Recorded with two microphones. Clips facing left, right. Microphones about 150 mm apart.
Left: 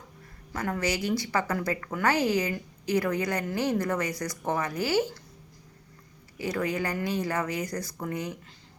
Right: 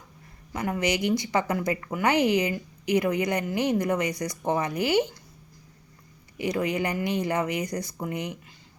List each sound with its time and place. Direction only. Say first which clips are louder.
0.5 s a woman's voice: right 3 dB; 15° right (ahead or behind)
6.4 s speech: right 3 dB; 20° right (ahead or behind)